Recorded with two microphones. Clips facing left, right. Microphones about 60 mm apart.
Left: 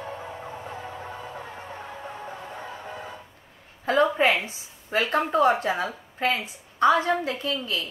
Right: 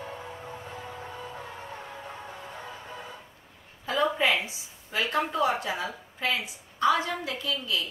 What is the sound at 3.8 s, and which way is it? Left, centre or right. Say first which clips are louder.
A woman's voice: left 5 dB; left.